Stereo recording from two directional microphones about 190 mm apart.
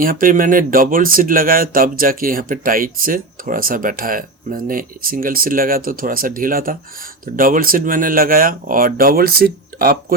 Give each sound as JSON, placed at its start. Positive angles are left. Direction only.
{"t": 0.0, "sound": "speech", "side_deg": -45}